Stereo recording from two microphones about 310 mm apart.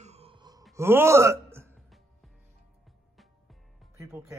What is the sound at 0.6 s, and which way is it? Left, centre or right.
Wail, centre.